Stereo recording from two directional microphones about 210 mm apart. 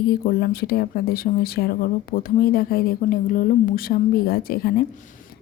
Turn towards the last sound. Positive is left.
turn(degrees=45)  # may be behind; listen again after turning